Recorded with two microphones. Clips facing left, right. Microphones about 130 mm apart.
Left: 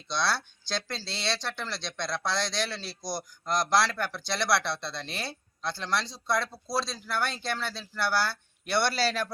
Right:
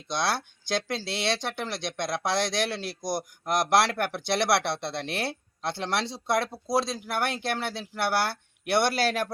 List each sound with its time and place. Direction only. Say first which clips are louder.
0.1 s a man's voice: right 1 dB; 50° right (ahead or behind)